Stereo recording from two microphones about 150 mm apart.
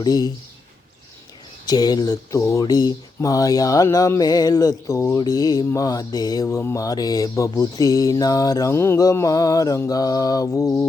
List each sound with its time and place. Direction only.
0.0 s speech: 25° left (ahead or behind)
1.6 s speech: 25° left (ahead or behind)